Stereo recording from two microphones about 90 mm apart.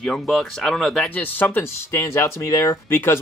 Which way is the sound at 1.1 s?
20° left (ahead or behind).